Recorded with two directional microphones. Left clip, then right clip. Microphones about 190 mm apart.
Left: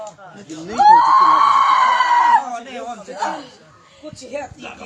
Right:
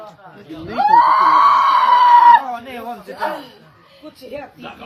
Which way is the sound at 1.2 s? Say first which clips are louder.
Right 1 dB; 10° right (ahead or behind).